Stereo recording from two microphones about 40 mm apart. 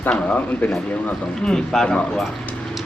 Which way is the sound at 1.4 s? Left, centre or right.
Centre.